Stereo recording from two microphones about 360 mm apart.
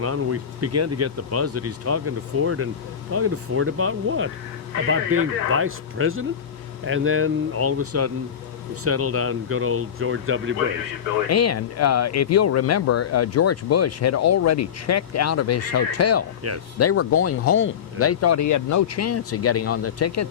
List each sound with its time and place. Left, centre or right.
0.0 s speech: right
11.3 s speech: left